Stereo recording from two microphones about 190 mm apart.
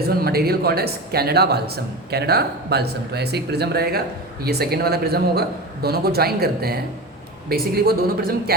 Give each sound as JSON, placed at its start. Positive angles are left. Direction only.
{"t": 0.2, "sound": "a woman's voice", "side_deg": -55}